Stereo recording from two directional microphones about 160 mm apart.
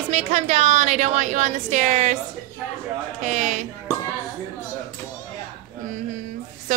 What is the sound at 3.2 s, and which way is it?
Speech, 50° right (ahead or behind).